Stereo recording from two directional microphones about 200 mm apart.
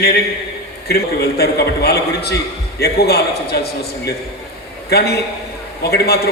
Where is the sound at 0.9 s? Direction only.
50° left (ahead or behind).